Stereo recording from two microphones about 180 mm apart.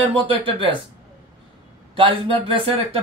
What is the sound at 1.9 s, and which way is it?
Speech, 30° right (ahead or behind).